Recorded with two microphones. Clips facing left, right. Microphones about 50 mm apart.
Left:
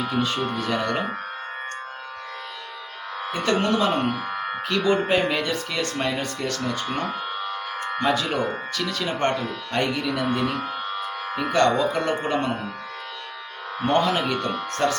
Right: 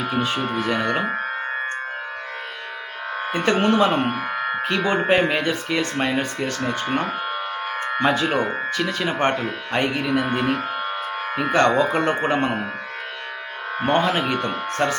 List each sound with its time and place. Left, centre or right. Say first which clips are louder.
0.2 s speech: right 2 dB; right
3.2 s speech: right 3 dB; right
13.7 s speech: right 1 dB; right